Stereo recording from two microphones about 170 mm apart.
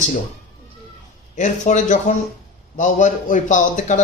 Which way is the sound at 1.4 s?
45° left (ahead or behind).